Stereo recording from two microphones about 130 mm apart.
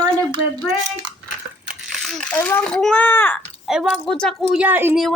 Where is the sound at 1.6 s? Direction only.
Centre (ahead or behind).